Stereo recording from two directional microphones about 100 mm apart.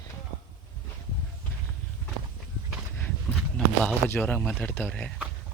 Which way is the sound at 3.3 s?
20° left (ahead or behind).